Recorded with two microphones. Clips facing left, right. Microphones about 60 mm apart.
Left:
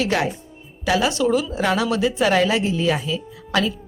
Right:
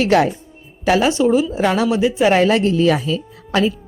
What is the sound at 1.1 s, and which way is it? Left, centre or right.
A woman's voice, right.